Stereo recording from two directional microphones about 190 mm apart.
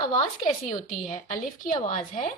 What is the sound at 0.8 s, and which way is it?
A woman's voice, 45° left (ahead or behind).